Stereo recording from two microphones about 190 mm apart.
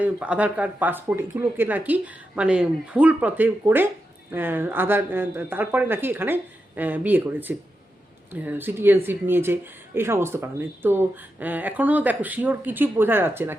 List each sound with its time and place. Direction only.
0.0 s speech: 5° right (ahead or behind)